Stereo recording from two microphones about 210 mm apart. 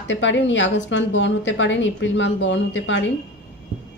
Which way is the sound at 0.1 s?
60° left (ahead or behind).